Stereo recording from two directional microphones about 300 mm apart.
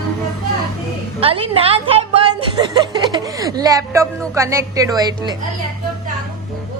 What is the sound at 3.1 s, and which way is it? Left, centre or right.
A woman's voice, centre.